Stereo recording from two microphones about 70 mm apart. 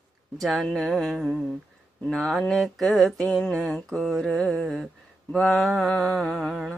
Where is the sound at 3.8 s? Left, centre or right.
Centre.